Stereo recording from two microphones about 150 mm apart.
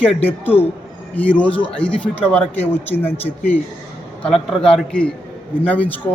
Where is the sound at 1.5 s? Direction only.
35° left (ahead or behind).